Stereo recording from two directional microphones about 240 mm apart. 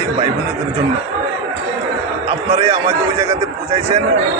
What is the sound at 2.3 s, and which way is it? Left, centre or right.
A man's voice, right.